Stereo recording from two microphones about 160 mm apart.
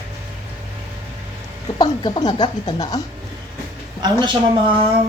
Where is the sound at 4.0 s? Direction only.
30° right (ahead or behind).